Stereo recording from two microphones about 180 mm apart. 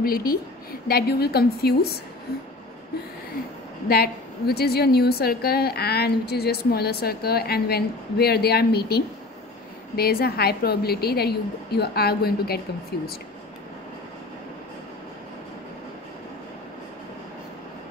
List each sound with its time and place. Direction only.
0.0 s a woman's voice: 55° left (ahead or behind)
3.9 s a woman's voice: 60° left (ahead or behind)